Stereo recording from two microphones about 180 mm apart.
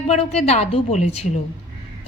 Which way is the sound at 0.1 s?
35° left (ahead or behind).